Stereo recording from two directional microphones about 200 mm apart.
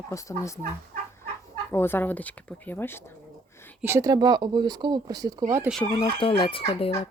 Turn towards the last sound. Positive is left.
turn(degrees=25)  # may be behind; listen again after turning